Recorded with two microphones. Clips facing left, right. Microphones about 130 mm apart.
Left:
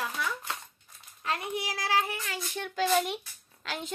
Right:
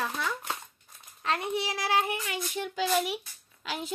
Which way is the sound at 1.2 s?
25° right (ahead or behind).